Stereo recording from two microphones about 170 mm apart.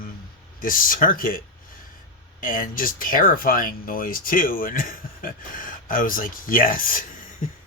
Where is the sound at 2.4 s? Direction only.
55° left (ahead or behind).